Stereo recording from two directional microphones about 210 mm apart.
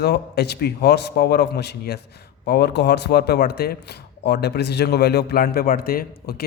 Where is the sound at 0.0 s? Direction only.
50° left (ahead or behind).